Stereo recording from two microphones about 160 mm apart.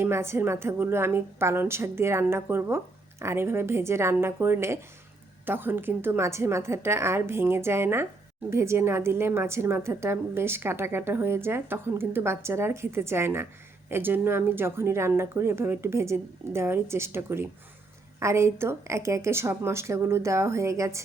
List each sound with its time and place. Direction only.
0.0 s a woman's voice: 15° right (ahead or behind)